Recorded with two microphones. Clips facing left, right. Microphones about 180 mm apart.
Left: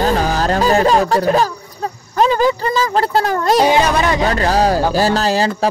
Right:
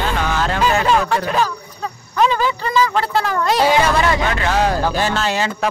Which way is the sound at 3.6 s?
20° left (ahead or behind).